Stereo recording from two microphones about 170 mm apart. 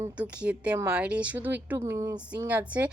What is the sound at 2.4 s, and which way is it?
Speech, 10° right (ahead or behind).